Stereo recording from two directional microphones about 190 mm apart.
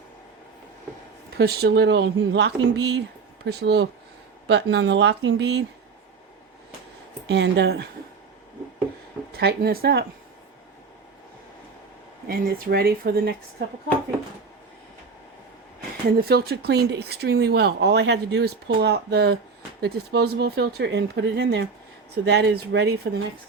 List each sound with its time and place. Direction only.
1.4 s speech: 55° right (ahead or behind)
7.3 s speech: 65° right (ahead or behind)
9.3 s speech: 55° right (ahead or behind)
12.3 s speech: 55° right (ahead or behind)
16.2 s speech: 55° right (ahead or behind)